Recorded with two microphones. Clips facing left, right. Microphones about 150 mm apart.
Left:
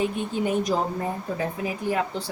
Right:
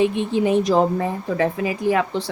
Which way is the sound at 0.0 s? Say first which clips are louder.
Right 6 dB; 90° right.